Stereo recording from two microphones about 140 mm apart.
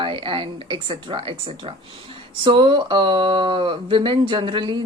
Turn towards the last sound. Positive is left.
turn(degrees=-35)  # may be behind; listen again after turning